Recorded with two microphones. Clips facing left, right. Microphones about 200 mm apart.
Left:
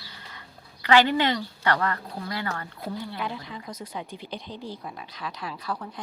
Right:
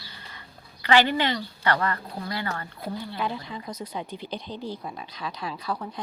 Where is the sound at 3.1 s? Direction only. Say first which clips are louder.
Right 3 dB; 30° right (ahead or behind).